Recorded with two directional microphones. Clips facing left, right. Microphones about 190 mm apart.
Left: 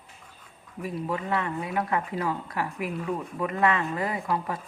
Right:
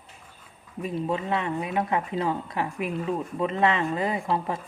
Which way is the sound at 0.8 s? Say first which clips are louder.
Right 3 dB; 25° right (ahead or behind).